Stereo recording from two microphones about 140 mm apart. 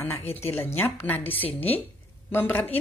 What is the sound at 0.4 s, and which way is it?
Speech, 15° left (ahead or behind).